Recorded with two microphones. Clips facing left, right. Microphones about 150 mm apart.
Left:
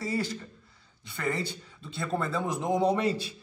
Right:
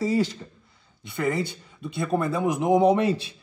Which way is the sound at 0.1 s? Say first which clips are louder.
Right 7 dB; 20° right (ahead or behind).